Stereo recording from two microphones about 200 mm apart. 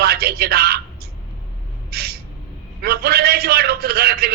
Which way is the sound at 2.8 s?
50° right (ahead or behind).